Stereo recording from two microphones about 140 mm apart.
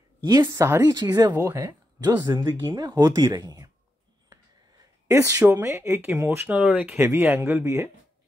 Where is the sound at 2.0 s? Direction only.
30° right (ahead or behind).